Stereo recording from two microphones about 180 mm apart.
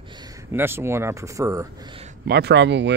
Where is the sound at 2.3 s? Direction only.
70° right (ahead or behind).